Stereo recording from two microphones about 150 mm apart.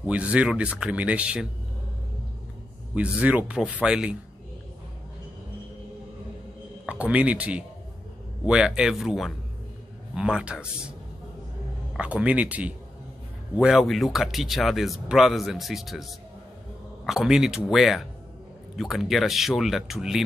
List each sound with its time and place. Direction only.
0.0 s speech: 10° right (ahead or behind)
2.9 s speech: 10° right (ahead or behind)
6.9 s speech: 10° right (ahead or behind)
12.0 s speech: 10° right (ahead or behind)